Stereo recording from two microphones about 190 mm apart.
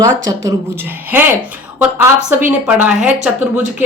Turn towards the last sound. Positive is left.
turn(degrees=-5)  # may be behind; listen again after turning